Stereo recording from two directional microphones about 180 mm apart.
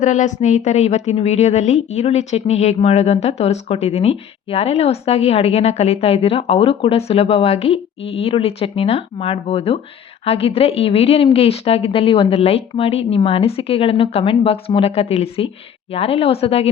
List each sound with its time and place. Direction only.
0.0 s a woman's voice: 45° left (ahead or behind)